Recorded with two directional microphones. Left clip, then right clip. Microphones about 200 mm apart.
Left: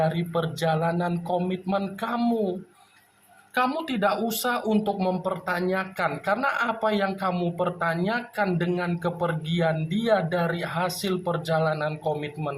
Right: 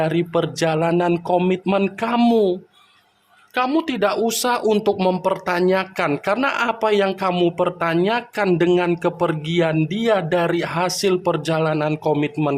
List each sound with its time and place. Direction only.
0.0 s speech: 50° right (ahead or behind)
3.5 s speech: 45° right (ahead or behind)